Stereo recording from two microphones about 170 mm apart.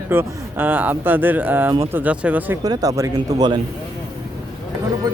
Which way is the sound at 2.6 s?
20° right (ahead or behind).